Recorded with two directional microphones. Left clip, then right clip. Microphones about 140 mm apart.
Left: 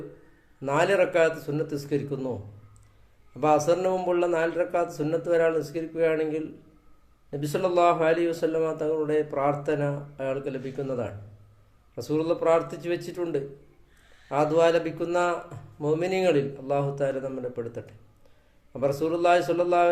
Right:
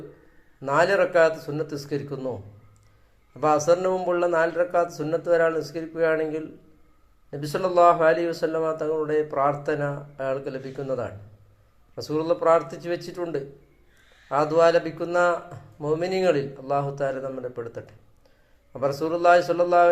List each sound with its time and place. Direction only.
0.6 s a man's voice: 25° left (ahead or behind)
3.4 s a man's voice: 20° left (ahead or behind)